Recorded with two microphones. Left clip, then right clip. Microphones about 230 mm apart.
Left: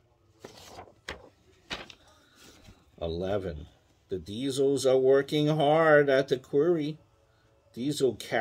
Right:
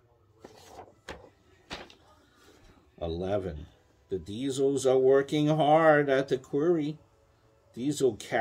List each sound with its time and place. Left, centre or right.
0.4 s wood: left
1.7 s a sound: left
3.0 s speech: left